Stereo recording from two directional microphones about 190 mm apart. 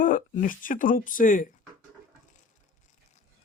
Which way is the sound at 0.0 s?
45° left (ahead or behind).